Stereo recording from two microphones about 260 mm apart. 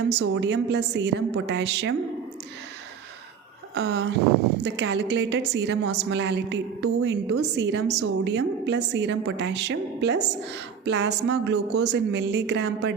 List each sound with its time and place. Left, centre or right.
0.1 s a woman's voice: right
3.8 s a woman's voice: right